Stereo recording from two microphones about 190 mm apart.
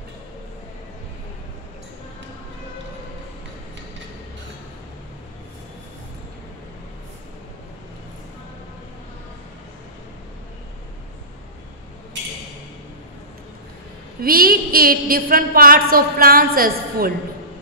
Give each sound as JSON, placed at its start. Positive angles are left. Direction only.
{"t": 14.2, "sound": "a woman's voice", "side_deg": -50}